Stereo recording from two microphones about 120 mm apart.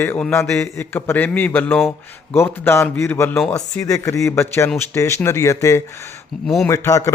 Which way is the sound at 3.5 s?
25° left (ahead or behind).